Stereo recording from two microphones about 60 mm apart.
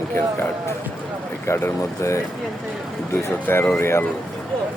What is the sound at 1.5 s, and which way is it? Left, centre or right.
Speech, left.